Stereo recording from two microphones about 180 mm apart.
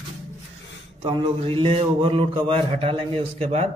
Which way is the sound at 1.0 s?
30° right (ahead or behind).